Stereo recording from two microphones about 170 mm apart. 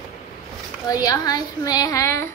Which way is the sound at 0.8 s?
20° left (ahead or behind).